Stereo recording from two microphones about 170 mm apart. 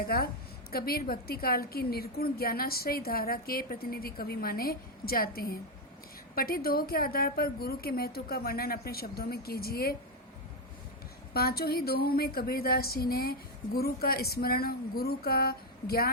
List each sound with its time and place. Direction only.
0.1 s a woman's voice: 60° left (ahead or behind)
11.3 s a woman's voice: 65° left (ahead or behind)